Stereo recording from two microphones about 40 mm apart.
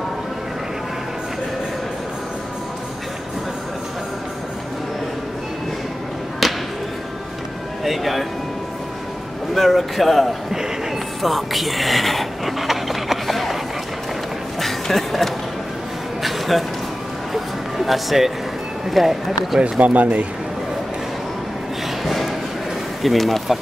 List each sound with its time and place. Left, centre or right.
6.4 s thump: centre
7.8 s speech: centre
9.5 s a man's voice: centre
11.2 s a sound: centre
14.6 s a sound: centre
17.3 s music: centre
18.9 s a man's voice: centre
19.6 s speech: right
22.0 s a sound: centre
23.0 s a man's voice: centre